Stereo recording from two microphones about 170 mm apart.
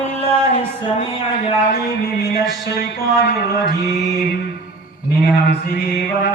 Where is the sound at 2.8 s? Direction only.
70° left (ahead or behind).